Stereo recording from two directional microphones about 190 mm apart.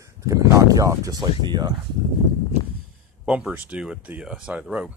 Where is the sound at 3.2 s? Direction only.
5° right (ahead or behind).